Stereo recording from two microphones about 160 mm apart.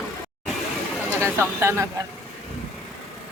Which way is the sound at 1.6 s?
15° right (ahead or behind).